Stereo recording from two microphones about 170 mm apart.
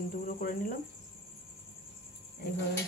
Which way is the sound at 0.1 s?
55° left (ahead or behind).